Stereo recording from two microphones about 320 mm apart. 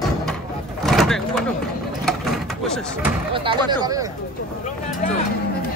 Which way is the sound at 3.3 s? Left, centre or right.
Centre.